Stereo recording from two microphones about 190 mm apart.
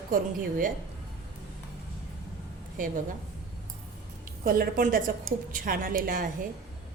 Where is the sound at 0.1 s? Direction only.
45° right (ahead or behind).